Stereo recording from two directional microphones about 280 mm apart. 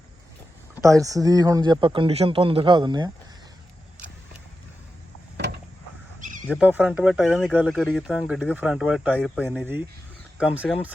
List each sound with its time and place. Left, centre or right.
0.8 s speech: centre
6.1 s a sound: right
6.5 s speech: centre